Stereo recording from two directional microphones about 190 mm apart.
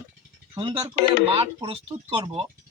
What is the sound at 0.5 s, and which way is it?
Speech, 25° right (ahead or behind).